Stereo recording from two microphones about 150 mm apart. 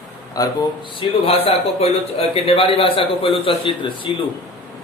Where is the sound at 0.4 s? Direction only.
25° left (ahead or behind).